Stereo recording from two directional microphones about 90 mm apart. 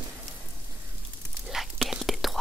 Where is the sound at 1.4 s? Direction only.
5° right (ahead or behind).